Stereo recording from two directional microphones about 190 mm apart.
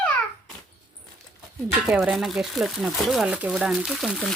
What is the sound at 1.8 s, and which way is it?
Speech, 5° right (ahead or behind).